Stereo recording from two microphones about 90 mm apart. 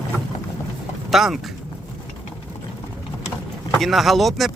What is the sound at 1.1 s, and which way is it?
Speech, 5° right (ahead or behind).